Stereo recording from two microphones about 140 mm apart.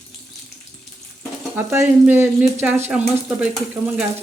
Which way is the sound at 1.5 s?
15° right (ahead or behind).